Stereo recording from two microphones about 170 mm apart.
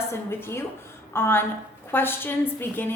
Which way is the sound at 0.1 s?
15° left (ahead or behind).